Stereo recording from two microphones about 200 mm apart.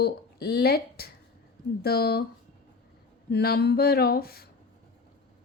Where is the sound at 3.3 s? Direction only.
55° left (ahead or behind).